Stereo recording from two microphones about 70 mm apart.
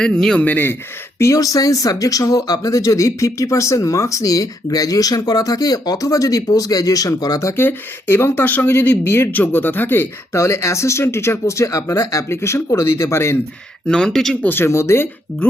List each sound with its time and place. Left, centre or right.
0.0 s speech: centre
0.4 s speech: left
1.2 s speech: left
7.4 s speech: left
9.0 s speech: left
9.3 s speech: left
10.3 s speech: left
13.8 s speech: centre
14.4 s speech: left